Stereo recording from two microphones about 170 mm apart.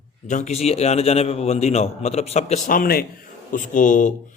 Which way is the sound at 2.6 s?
60° left (ahead or behind).